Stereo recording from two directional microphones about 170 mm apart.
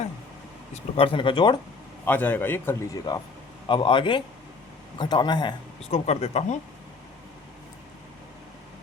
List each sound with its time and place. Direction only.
0.7 s speech: 35° left (ahead or behind)
2.0 s a man's voice: 10° left (ahead or behind)
3.7 s speech: 30° left (ahead or behind)
6.1 s speech: 40° left (ahead or behind)